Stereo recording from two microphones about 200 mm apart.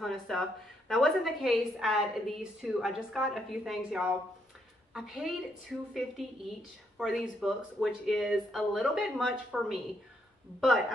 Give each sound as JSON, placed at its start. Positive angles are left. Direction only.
{"t": 0.0, "sound": "a woman's voice", "side_deg": 0}